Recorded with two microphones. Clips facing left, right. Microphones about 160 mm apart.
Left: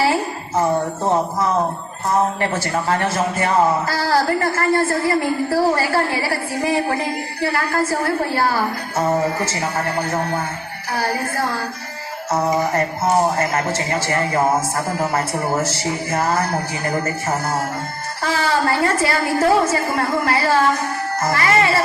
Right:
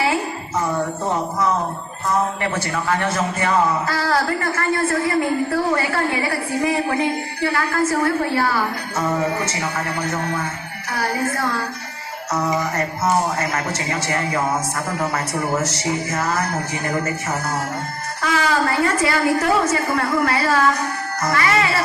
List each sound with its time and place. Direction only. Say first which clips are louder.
0.0 s a sound: left 2 dB; 30° left (ahead or behind)
2.7 s speech: left 2 dB; 30° left (ahead or behind)
13.3 s a child's voice: left 3 dB; 30° left (ahead or behind)